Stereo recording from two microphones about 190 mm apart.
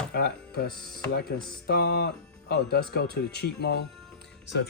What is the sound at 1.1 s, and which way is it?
Speech, 60° left (ahead or behind).